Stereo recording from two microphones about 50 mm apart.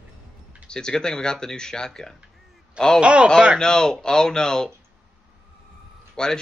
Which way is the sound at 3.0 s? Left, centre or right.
Right.